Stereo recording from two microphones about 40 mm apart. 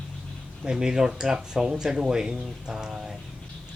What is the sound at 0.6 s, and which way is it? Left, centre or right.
Speech, centre.